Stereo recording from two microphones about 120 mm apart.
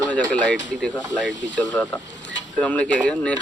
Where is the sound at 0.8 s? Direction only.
10° left (ahead or behind).